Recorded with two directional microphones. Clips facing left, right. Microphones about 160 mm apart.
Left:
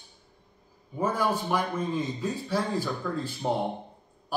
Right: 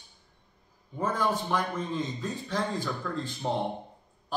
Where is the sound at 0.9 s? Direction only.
10° left (ahead or behind).